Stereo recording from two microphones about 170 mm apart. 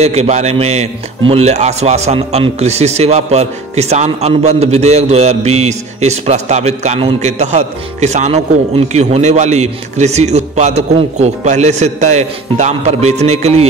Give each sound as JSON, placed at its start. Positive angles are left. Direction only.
{"t": 0.0, "sound": "a man's voice", "side_deg": -40}